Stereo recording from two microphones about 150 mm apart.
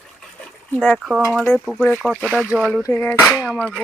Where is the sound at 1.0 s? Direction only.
Centre (ahead or behind).